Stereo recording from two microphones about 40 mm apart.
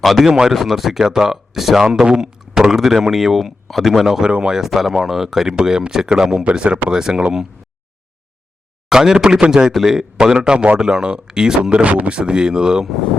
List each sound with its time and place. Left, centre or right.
0.0 s speech: centre
0.3 s speech: centre
2.0 s speech: right
4.3 s speech: right
4.5 s speech: centre
6.4 s speech: right
6.9 s speech: centre
8.9 s speech: centre
11.7 s speech: right